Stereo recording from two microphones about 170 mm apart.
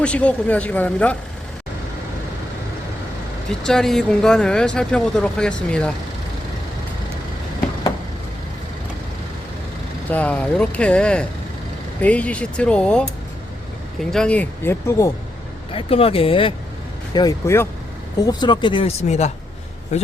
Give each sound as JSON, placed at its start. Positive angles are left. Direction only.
{"t": 0.0, "sound": "speech", "side_deg": 5}
{"t": 3.6, "sound": "speech", "side_deg": 5}
{"t": 10.1, "sound": "speech", "side_deg": 10}
{"t": 15.7, "sound": "speech", "side_deg": 35}
{"t": 17.2, "sound": "a man's voice", "side_deg": 20}